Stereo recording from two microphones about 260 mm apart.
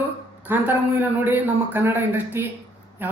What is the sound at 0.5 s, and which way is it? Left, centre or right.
Speech, centre.